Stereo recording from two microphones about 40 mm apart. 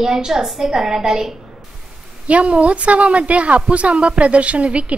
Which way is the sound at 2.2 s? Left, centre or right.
Right.